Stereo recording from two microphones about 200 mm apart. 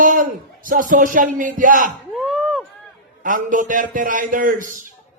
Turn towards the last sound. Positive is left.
turn(degrees=-40)  # may be behind; listen again after turning